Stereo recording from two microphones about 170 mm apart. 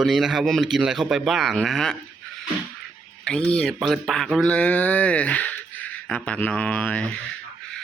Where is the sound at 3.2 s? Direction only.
5° left (ahead or behind).